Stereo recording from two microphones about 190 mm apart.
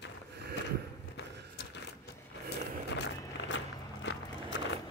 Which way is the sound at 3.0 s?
75° left (ahead or behind).